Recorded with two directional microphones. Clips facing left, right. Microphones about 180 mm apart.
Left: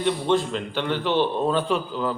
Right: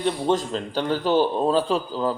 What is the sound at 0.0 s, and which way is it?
A man's voice, 40° right (ahead or behind).